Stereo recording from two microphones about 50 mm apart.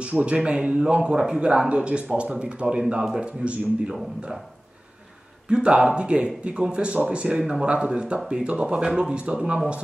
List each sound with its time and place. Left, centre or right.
0.0 s speech: right
5.5 s speech: centre